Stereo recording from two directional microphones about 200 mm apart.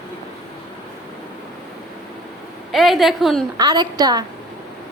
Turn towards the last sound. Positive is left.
turn(degrees=-20)  # may be behind; listen again after turning